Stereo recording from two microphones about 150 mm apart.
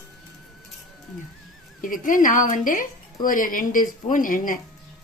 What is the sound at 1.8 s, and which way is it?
A woman's voice, 65° left (ahead or behind).